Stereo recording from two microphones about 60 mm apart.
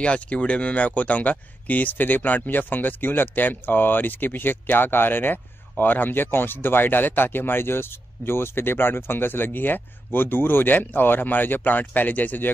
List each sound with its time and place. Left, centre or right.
0.0 s speech: centre